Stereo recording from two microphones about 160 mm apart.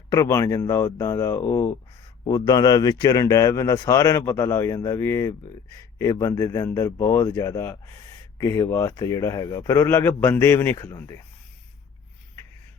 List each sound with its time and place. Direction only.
0.1 s a man's voice: 20° left (ahead or behind)